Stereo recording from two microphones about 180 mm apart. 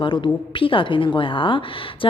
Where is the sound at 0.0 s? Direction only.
25° left (ahead or behind).